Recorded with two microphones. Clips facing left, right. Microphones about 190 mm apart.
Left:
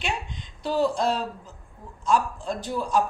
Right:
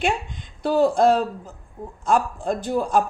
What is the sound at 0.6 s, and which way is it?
A woman's voice, 50° right (ahead or behind).